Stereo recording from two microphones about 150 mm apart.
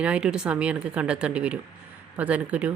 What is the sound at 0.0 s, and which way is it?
A woman's voice, 5° right (ahead or behind).